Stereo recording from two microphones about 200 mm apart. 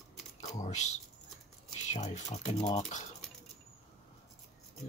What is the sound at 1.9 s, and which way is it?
Speech, 35° left (ahead or behind).